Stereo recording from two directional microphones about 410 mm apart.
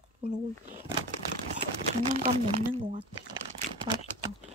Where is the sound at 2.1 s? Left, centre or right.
Centre.